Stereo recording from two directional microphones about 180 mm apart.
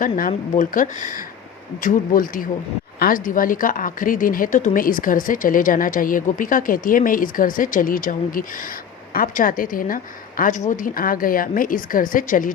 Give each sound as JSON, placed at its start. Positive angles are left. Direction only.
{"t": 0.0, "sound": "speech", "side_deg": 45}